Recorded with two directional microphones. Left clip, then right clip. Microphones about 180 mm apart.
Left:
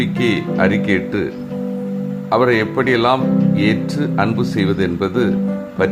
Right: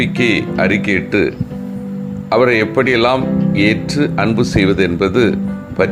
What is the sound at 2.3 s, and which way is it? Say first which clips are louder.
Speech: right 3 dB; 15° right (ahead or behind).